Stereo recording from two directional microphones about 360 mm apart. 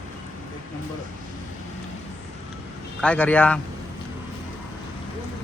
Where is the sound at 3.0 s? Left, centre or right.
Centre.